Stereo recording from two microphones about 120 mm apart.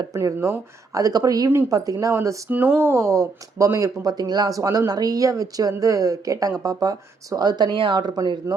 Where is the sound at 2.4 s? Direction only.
15° right (ahead or behind).